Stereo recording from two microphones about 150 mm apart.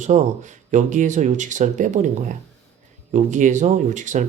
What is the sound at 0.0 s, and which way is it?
Speech, 55° right (ahead or behind).